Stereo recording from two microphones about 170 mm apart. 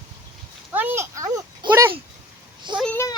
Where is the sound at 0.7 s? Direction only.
10° right (ahead or behind).